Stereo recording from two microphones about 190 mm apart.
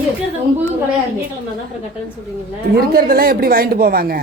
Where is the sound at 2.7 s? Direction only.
50° right (ahead or behind).